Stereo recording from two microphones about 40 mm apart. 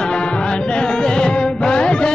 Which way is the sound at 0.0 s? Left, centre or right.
Left.